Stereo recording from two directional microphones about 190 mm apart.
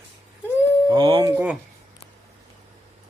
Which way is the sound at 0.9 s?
20° right (ahead or behind).